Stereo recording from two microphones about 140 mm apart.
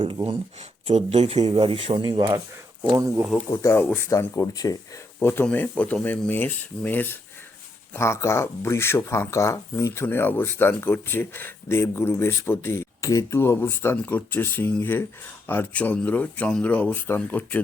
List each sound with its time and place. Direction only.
0.0 s speech: 35° right (ahead or behind)
0.9 s speech: 50° right (ahead or behind)
1.5 s speech: 40° right (ahead or behind)
2.8 s speech: 20° right (ahead or behind)
3.6 s speech: 20° left (ahead or behind)